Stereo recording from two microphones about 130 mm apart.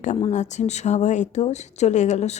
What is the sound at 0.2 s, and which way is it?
Speech, 60° left (ahead or behind).